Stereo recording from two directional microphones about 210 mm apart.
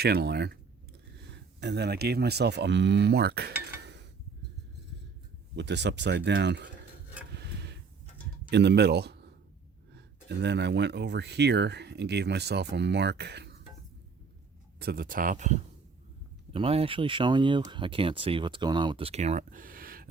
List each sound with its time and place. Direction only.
0.0 s speech: 50° right (ahead or behind)
1.6 s speech: 50° right (ahead or behind)
3.8 s mechanisms: 55° right (ahead or behind)
5.5 s speech: 55° right (ahead or behind)
7.3 s a sound: 55° right (ahead or behind)
8.4 s speech: 55° right (ahead or behind)
14.8 s speech: 45° right (ahead or behind)
16.5 s speech: 25° right (ahead or behind); by 20.1 s 45° right (ahead or behind)